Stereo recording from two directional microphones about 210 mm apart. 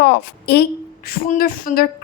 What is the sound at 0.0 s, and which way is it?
A woman's voice, 50° left (ahead or behind).